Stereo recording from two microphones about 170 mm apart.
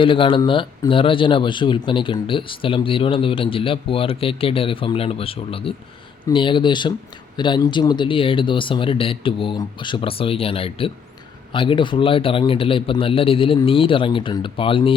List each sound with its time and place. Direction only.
0.0 s speech: 30° left (ahead or behind)